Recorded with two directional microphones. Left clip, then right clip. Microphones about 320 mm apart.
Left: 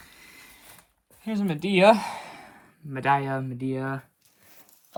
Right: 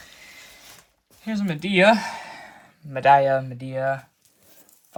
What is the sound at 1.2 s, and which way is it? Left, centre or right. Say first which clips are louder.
Speech: right 1 dB; centre.